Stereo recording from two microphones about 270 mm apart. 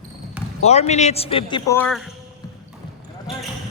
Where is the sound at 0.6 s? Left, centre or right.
Left; by 2.1 s centre.